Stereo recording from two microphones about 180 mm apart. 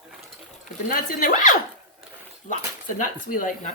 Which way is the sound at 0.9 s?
50° left (ahead or behind).